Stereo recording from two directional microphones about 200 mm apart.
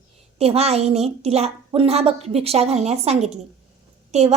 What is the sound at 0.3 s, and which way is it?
A woman's voice, 30° right (ahead or behind).